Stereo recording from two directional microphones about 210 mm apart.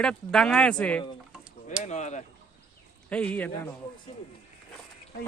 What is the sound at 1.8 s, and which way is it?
Speech, 35° left (ahead or behind).